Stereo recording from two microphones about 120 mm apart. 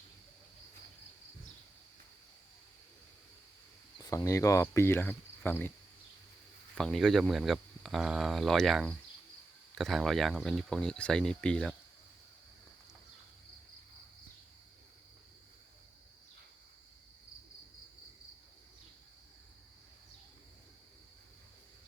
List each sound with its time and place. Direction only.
4.0 s speech: 25° left (ahead or behind)
6.7 s speech: 5° left (ahead or behind)